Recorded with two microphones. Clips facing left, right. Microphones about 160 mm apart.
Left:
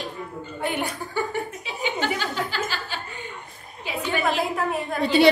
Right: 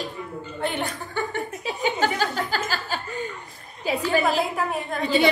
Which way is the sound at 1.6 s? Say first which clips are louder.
Right 7 dB; 40° right (ahead or behind).